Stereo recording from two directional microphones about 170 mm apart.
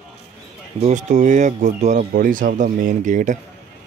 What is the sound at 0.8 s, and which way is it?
Speech, 45° right (ahead or behind).